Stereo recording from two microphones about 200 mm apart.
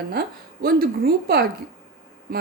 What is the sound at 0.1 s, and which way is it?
A woman's voice, 50° right (ahead or behind).